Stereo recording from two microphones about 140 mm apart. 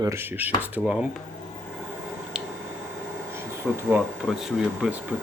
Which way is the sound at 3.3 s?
15° right (ahead or behind).